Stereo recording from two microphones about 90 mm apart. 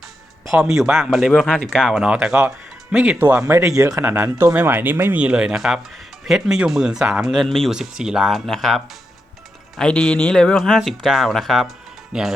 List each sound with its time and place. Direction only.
0.5 s speech: 10° right (ahead or behind)
2.9 s speech: 20° right (ahead or behind)
3.4 s speech: 35° right (ahead or behind)
5.2 s speech: 10° right (ahead or behind)